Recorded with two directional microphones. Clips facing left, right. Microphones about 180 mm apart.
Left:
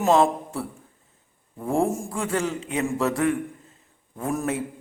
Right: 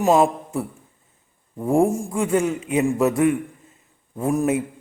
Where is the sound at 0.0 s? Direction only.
10° right (ahead or behind).